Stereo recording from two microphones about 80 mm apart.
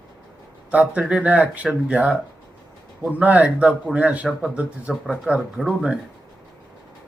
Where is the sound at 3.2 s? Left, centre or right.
Centre.